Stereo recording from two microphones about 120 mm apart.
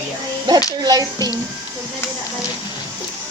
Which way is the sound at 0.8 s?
30° right (ahead or behind).